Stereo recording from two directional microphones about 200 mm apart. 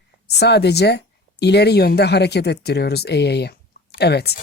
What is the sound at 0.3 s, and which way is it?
Speech, 55° left (ahead or behind).